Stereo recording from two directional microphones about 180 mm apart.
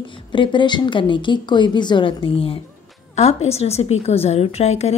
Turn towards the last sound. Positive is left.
turn(degrees=35)  # may be behind; listen again after turning